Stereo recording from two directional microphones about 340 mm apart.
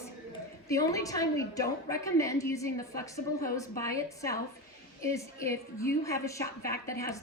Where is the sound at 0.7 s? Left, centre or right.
Centre.